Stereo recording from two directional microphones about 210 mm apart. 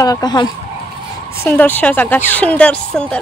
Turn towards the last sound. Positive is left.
turn(degrees=5)  # may be behind; listen again after turning